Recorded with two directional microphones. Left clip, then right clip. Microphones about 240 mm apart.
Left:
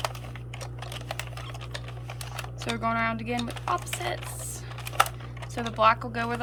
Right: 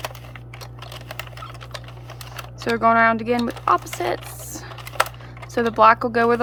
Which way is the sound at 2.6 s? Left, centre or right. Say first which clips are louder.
Right 12 dB; centre.